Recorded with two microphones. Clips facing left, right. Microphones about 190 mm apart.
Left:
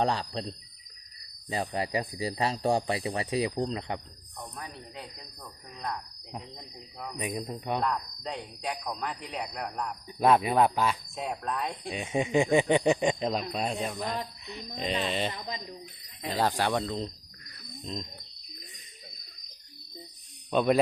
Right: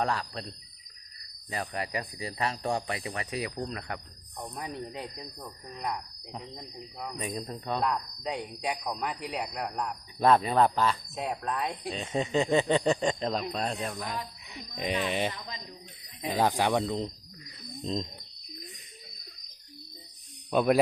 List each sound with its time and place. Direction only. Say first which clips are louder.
0.0 s speech: left 2 dB; 30° left (ahead or behind)
1.5 s speech: left 3 dB; 25° left (ahead or behind)
4.4 s speech: right 5 dB; 20° right (ahead or behind)
7.2 s speech: left 3 dB; 15° left (ahead or behind)
7.8 s speech: even; 10° right (ahead or behind)
10.2 s speech: even; 10° left (ahead or behind)
11.1 s speech: right 1 dB; centre (ahead or behind)
11.9 s speech: left 3 dB; 15° left (ahead or behind); by 17.5 s 15° right (ahead or behind)
20.5 s speech: even; 5° right (ahead or behind)